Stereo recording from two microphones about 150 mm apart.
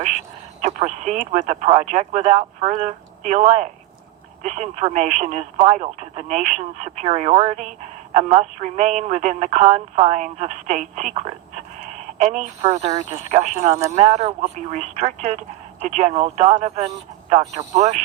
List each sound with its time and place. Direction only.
0.6 s speech: 50° right (ahead or behind)